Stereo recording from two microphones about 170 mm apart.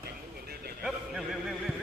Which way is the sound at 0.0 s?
65° right (ahead or behind).